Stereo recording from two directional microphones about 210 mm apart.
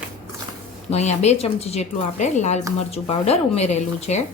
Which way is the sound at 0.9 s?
30° left (ahead or behind).